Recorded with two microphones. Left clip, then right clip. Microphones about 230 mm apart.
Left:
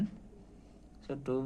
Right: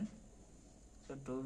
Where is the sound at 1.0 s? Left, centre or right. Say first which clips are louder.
Left 10 dB; left.